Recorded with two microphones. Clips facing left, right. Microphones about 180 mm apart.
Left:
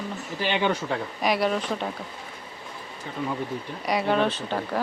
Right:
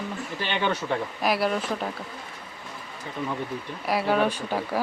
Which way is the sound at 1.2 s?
Centre (ahead or behind).